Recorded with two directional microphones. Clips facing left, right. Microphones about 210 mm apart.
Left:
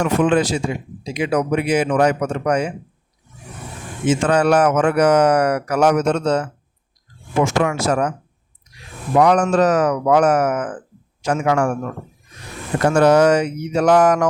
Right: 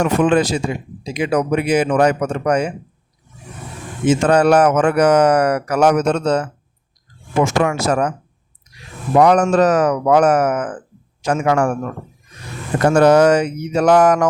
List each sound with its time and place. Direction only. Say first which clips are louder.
0.0 s speech: right 2 dB; 40° right (ahead or behind)
4.1 s speech: right 3 dB; 40° right (ahead or behind)
7.4 s speech: right 1 dB; 45° right (ahead or behind)
9.1 s speech: right 2 dB; 40° right (ahead or behind)
12.9 s speech: right 2 dB; 45° right (ahead or behind)